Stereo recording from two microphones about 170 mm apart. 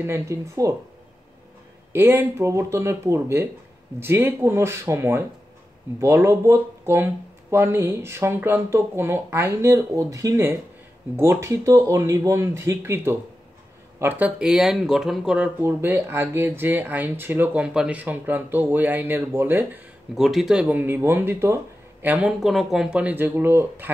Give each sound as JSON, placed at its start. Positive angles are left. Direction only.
{"t": 0.0, "sound": "speech", "side_deg": -15}
{"t": 1.9, "sound": "speech", "side_deg": -15}